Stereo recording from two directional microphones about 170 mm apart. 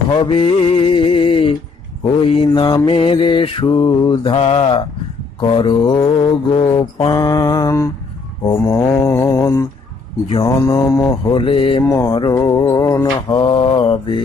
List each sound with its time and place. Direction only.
0.1 s a sound: 30° left (ahead or behind)
2.2 s mantra: 30° left (ahead or behind)
11.3 s mantra: 30° left (ahead or behind)
11.8 s mantra: 15° left (ahead or behind)
12.1 s mantra: 25° left (ahead or behind)